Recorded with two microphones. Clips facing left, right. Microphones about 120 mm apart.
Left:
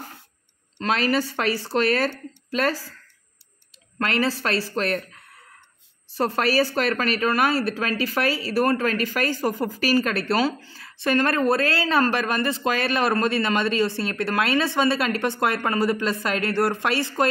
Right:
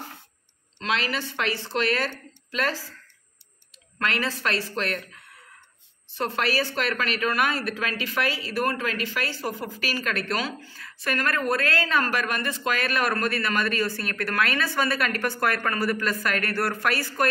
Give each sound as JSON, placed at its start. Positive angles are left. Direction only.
{"t": 0.7, "sound": "speech", "side_deg": 45}
{"t": 4.0, "sound": "speech", "side_deg": 35}